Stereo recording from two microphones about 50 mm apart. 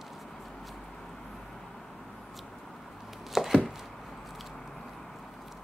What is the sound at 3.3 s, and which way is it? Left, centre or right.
Chopping, centre.